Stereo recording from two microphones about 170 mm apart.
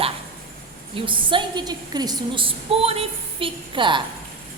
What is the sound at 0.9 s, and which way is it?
A woman's voice, 30° right (ahead or behind).